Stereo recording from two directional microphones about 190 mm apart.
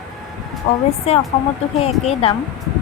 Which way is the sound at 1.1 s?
35° left (ahead or behind).